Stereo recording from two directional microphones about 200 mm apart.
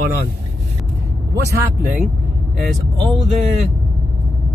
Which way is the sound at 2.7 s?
Centre (ahead or behind).